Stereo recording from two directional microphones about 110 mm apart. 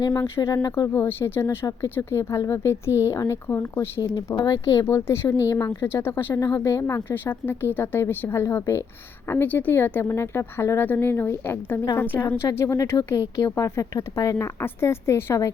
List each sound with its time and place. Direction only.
0.0 s speech: 35° left (ahead or behind)
0.9 s speech: 20° left (ahead or behind)
4.4 s a woman's voice: 35° left (ahead or behind); by 12.2 s 20° left (ahead or behind)
12.5 s speech: 30° left (ahead or behind)